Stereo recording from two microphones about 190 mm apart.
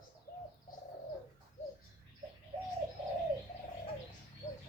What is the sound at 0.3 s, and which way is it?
Bird, 50° left (ahead or behind).